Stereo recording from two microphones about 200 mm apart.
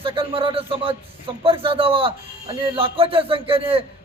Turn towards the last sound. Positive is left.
turn(degrees=-30)  # may be behind; listen again after turning